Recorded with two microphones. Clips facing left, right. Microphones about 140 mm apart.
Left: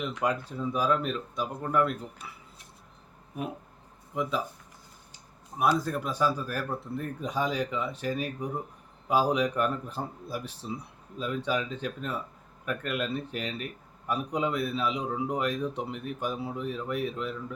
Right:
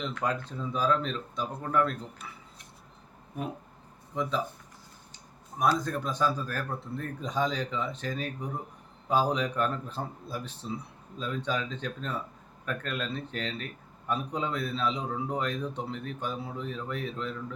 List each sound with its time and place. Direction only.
0.0 s a man's voice: 10° left (ahead or behind)
4.1 s a man's voice: 10° left (ahead or behind)
5.5 s a man's voice: 10° left (ahead or behind)